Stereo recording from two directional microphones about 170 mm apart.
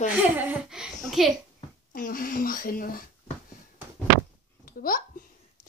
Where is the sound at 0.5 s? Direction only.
5° right (ahead or behind).